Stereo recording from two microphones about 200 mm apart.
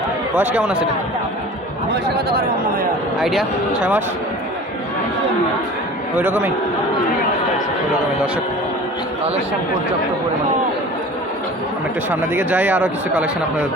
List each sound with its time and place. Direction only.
0.3 s speech: 10° right (ahead or behind)
1.9 s speech: 55° right (ahead or behind)
3.2 s speech: centre (ahead or behind)
6.1 s speech: 10° right (ahead or behind)
12.1 s speech: 10° right (ahead or behind)